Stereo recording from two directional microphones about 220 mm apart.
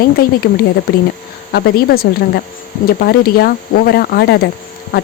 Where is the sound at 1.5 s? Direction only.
45° left (ahead or behind).